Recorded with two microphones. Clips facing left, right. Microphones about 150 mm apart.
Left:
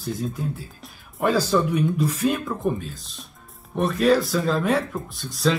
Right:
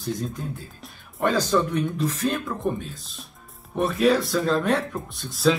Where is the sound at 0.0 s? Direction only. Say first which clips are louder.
Left 1 dB; 5° left (ahead or behind).